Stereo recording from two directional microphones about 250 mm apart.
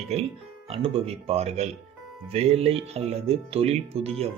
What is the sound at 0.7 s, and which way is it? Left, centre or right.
Speech, right.